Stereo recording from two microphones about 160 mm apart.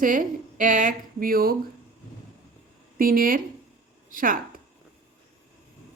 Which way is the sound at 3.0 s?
60° right (ahead or behind).